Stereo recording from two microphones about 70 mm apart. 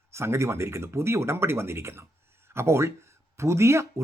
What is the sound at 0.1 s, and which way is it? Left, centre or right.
Speech, right.